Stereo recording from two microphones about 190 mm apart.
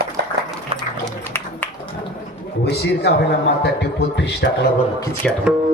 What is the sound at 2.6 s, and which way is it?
A man's voice, 60° left (ahead or behind).